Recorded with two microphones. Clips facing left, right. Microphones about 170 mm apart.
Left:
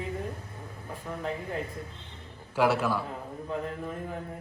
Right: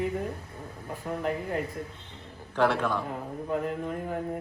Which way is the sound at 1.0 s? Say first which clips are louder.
Right 5 dB; 35° right (ahead or behind).